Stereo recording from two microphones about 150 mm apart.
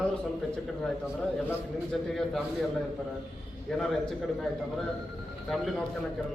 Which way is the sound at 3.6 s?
Centre (ahead or behind).